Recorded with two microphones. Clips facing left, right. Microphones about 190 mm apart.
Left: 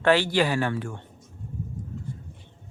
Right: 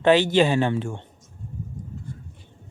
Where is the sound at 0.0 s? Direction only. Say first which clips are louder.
Right 4 dB; 20° right (ahead or behind).